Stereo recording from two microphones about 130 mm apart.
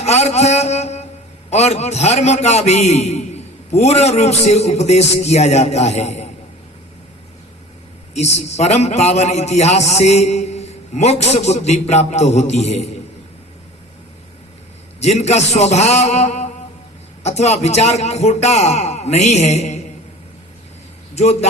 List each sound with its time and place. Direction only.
0.0 s a sound: 55° left (ahead or behind)
1.5 s a man's voice: 55° left (ahead or behind)
8.1 s a man's voice: 55° left (ahead or behind)
15.0 s a man's voice: 55° left (ahead or behind)
21.2 s a man's voice: 55° left (ahead or behind)